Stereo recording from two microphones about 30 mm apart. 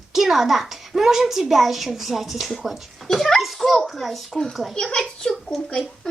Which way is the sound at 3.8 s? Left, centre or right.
Centre.